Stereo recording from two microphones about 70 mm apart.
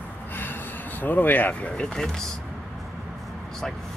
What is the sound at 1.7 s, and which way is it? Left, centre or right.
Speech, centre.